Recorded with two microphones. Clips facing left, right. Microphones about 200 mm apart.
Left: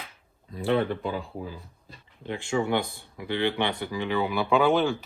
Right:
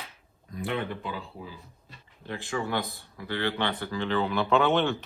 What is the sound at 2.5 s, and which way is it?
Speech, 20° left (ahead or behind).